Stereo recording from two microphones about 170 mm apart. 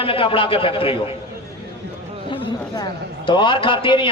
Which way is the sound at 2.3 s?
25° left (ahead or behind).